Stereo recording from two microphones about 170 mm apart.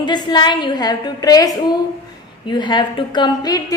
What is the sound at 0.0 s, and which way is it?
A woman's voice, 25° left (ahead or behind).